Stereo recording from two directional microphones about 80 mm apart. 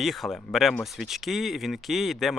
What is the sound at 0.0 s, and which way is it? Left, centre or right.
Speech, centre.